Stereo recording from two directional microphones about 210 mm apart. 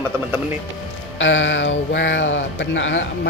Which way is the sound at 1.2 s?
65° left (ahead or behind).